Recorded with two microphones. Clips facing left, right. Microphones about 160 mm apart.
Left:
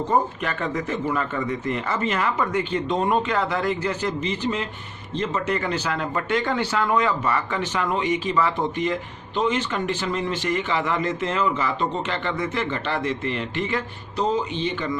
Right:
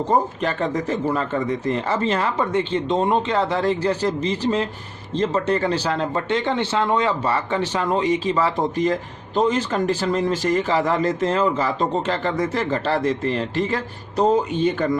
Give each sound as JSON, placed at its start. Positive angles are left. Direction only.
{"t": 0.1, "sound": "speech", "side_deg": -35}